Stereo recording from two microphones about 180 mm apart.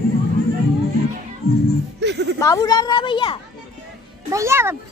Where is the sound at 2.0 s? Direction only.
70° right (ahead or behind).